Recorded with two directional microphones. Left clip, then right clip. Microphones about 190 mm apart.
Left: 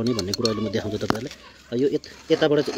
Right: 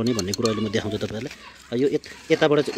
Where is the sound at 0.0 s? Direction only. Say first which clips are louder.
Even; 5° right (ahead or behind).